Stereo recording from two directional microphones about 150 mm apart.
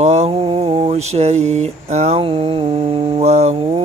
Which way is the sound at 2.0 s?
45° right (ahead or behind).